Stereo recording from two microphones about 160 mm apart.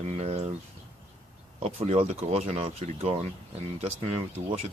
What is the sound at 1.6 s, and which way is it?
Speech, 40° right (ahead or behind).